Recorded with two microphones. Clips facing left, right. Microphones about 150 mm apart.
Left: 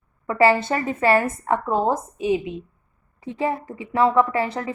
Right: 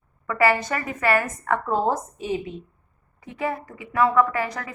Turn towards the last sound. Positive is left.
turn(degrees=25)  # may be behind; listen again after turning